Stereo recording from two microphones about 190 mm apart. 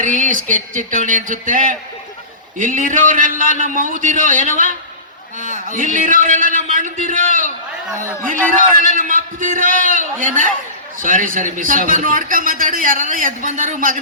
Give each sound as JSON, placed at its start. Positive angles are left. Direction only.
{"t": 0.0, "sound": "a sound", "side_deg": -45}
{"t": 2.6, "sound": "a man's voice", "side_deg": -45}
{"t": 5.7, "sound": "a man's voice", "side_deg": -45}